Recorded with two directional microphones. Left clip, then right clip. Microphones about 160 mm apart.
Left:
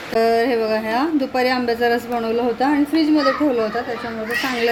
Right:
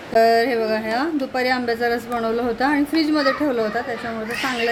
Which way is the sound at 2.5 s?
15° right (ahead or behind).